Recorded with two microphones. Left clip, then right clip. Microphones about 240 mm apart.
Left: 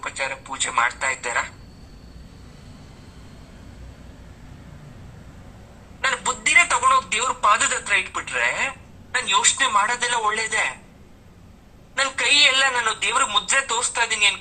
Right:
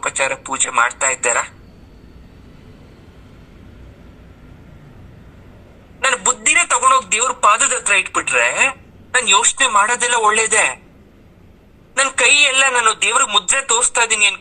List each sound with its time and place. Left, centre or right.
0.0 s a man's voice: right
6.0 s a man's voice: right
11.9 s a man's voice: right